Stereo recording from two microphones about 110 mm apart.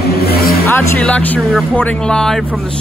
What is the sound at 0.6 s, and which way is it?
Speech, 15° left (ahead or behind).